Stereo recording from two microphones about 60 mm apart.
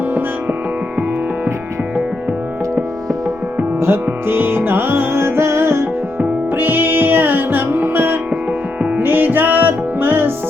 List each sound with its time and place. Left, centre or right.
3.8 s music: right
6.6 s music: right